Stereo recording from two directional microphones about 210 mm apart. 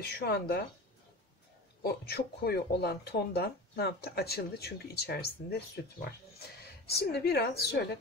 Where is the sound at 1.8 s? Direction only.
50° left (ahead or behind).